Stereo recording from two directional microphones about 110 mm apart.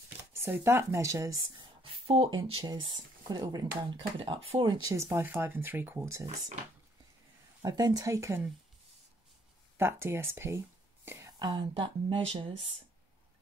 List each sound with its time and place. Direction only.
0.2 s speech: 20° right (ahead or behind)
1.8 s speech: 60° right (ahead or behind)
2.8 s speech: 45° right (ahead or behind)
4.2 s speech: 55° right (ahead or behind)
4.6 s speech: 30° right (ahead or behind)
7.6 s speech: 35° right (ahead or behind)
9.8 s speech: 20° right (ahead or behind)
11.1 s a sound: 25° right (ahead or behind)
11.3 s speech: 45° right (ahead or behind)